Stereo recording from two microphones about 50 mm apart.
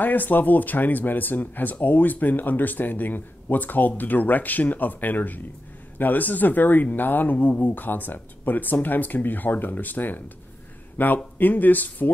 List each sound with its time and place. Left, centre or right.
0.0 s speech: left